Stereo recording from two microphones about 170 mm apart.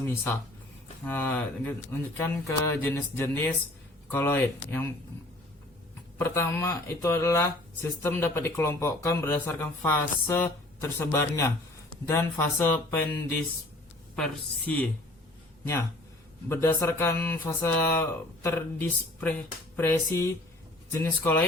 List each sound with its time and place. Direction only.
1.0 s speech: 10° left (ahead or behind)
6.1 s speech: 15° left (ahead or behind)
16.5 s speech: 15° left (ahead or behind)